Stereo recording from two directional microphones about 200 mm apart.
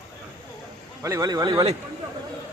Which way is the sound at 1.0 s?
15° right (ahead or behind).